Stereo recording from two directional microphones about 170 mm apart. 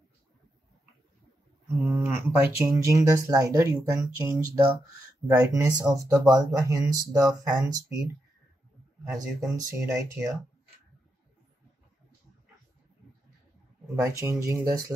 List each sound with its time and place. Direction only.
1.8 s a sound: 10° right (ahead or behind)
2.6 s speech: 20° right (ahead or behind)
9.4 s speech: 20° right (ahead or behind)
13.9 s speech: 15° right (ahead or behind)